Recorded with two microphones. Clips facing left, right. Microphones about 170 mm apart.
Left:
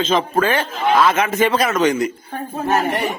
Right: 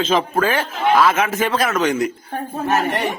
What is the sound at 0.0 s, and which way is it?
A man's voice, 5° right (ahead or behind).